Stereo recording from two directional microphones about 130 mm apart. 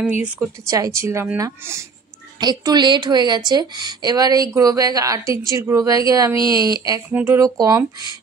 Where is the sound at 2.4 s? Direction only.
30° right (ahead or behind).